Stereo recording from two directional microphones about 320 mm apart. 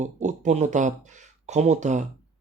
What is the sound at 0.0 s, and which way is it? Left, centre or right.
Speech, right.